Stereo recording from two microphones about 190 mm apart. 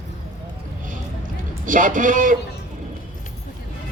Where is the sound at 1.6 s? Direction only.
45° right (ahead or behind).